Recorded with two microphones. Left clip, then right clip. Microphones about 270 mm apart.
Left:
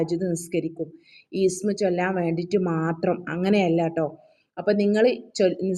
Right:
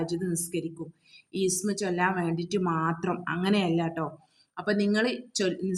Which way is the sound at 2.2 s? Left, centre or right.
Right.